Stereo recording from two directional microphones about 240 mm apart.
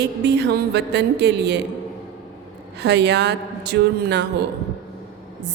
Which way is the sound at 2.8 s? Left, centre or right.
Right.